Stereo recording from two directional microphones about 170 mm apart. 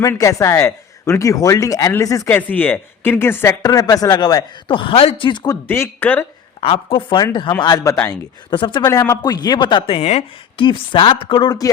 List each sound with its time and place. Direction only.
0.0 s speech: 20° left (ahead or behind)
5.6 s speech: 15° left (ahead or behind)
6.6 s speech: 30° left (ahead or behind)
10.6 s speech: 30° left (ahead or behind)